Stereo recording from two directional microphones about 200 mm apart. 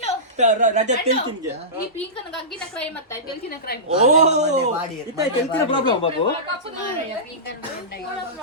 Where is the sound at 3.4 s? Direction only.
50° left (ahead or behind).